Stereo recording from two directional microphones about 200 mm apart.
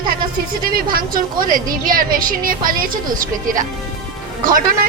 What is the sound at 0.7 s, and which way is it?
A woman's voice, 45° right (ahead or behind).